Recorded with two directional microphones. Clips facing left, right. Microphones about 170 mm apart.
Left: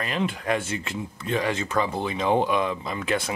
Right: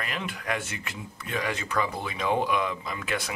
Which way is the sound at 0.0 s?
30° left (ahead or behind).